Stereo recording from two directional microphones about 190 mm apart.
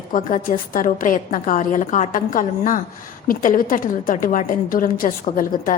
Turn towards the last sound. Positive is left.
turn(degrees=45)  # may be behind; listen again after turning